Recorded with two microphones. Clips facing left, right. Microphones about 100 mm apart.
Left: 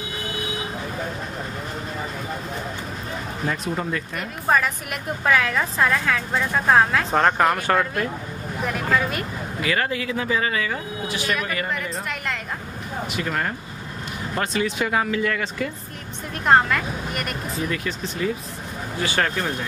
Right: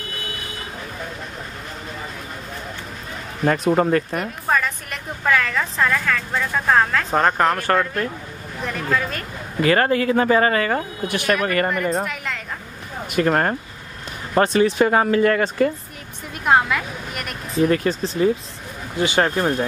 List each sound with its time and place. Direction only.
3.4 s speech: 55° right (ahead or behind)
4.5 s a woman's voice: 5° left (ahead or behind)
7.1 s speech: 5° right (ahead or behind)
9.6 s speech: 45° right (ahead or behind)
13.1 s speech: 50° right (ahead or behind)
16.4 s speech: 5° right (ahead or behind)
17.6 s speech: 40° right (ahead or behind)
18.9 s speech: 25° right (ahead or behind)